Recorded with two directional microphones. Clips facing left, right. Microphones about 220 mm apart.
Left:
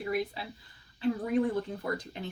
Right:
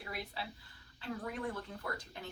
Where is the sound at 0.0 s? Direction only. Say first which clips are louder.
Left 11 dB; 15° left (ahead or behind).